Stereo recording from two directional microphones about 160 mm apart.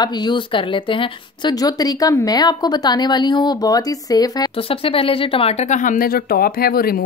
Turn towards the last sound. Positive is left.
turn(degrees=70)  # may be behind; listen again after turning